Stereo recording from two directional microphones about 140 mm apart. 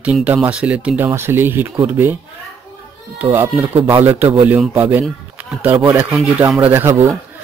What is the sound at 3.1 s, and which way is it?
Speech, 15° right (ahead or behind).